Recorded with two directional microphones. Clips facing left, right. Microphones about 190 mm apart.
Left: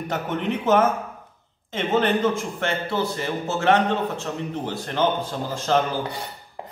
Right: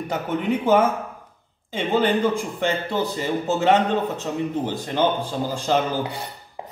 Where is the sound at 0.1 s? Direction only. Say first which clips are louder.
Right 2 dB; 10° right (ahead or behind).